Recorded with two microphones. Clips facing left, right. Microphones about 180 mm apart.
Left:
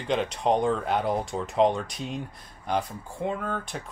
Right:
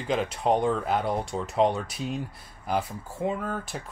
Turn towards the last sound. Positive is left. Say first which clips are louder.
# even
turn(degrees=-5)  # may be behind; listen again after turning